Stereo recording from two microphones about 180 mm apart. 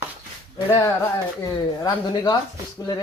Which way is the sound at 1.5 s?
20° left (ahead or behind).